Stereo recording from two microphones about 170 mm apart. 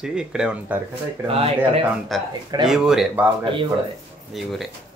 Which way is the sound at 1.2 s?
35° right (ahead or behind).